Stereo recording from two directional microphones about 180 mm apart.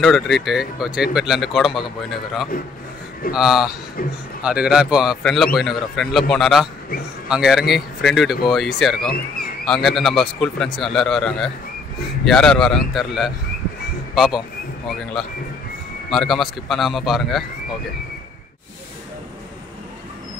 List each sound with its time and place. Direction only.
0.0 s speech: centre (ahead or behind)
3.3 s speech: centre (ahead or behind)
4.0 s a man's voice: 55° left (ahead or behind)
4.4 s speech: 5° right (ahead or behind)